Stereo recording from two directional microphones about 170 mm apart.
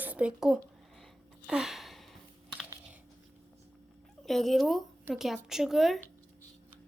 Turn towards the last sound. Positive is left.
turn(degrees=0)  # may be behind; listen again after turning